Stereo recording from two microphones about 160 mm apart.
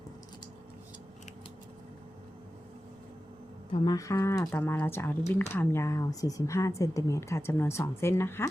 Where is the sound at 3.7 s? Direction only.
25° left (ahead or behind).